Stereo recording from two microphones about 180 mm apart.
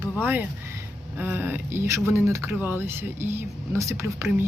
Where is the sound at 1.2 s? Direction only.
10° right (ahead or behind).